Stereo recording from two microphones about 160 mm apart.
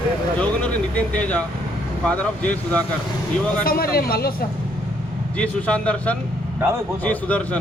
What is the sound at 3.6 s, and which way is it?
Speech, 70° left (ahead or behind).